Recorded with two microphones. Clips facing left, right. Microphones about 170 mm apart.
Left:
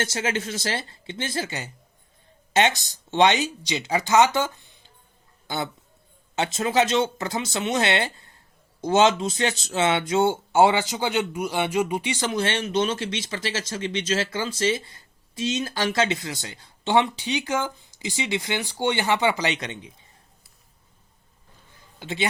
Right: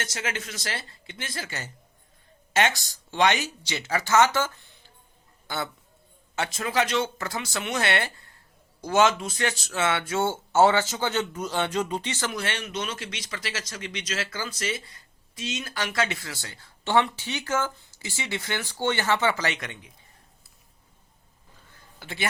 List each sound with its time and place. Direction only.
0.0 s a man's voice: 30° left (ahead or behind)
21.9 s a man's voice: 20° left (ahead or behind)